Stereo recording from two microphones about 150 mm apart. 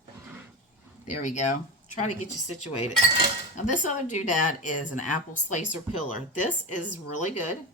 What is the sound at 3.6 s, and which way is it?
Speech, 55° left (ahead or behind).